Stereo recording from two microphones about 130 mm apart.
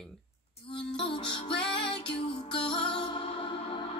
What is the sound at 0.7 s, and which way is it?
Music, 40° left (ahead or behind).